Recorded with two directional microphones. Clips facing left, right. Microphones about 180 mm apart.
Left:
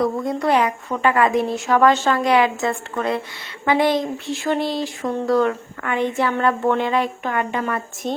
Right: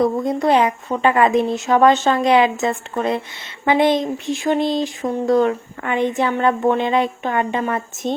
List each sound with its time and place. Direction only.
0.0 s speech: 20° right (ahead or behind)